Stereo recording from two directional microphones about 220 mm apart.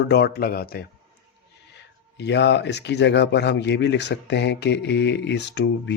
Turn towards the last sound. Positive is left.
turn(degrees=50)  # may be behind; listen again after turning